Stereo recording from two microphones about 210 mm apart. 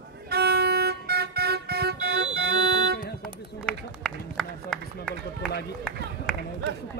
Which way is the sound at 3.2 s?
5° left (ahead or behind).